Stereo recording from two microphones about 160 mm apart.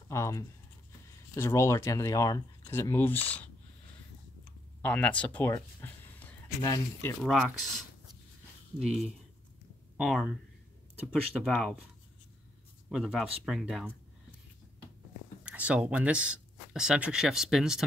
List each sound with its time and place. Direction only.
0.1 s speech: 20° left (ahead or behind)
4.8 s speech: 10° left (ahead or behind)
7.2 s speech: 5° right (ahead or behind)
8.8 s speech: centre (ahead or behind)
11.4 s speech: centre (ahead or behind)
12.9 s speech: 5° right (ahead or behind)
15.4 s speech: 10° right (ahead or behind)